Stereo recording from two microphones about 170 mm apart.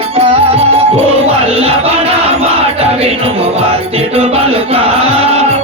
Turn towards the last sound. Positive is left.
turn(degrees=-40)  # may be behind; listen again after turning